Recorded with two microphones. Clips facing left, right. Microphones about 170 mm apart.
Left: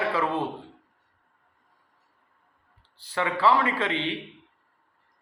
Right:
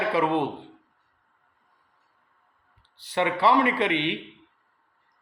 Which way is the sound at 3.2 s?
20° right (ahead or behind).